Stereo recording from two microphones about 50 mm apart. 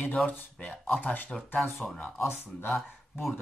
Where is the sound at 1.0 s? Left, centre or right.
Left.